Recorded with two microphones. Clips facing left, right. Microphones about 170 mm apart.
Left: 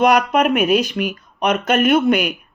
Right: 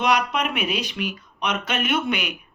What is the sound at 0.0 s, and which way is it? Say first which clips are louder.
Speech: left 8 dB; 45° left (ahead or behind).